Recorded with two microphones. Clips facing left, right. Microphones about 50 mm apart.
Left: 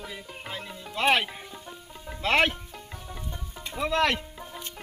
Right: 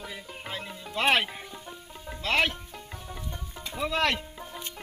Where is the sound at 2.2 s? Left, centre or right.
Centre.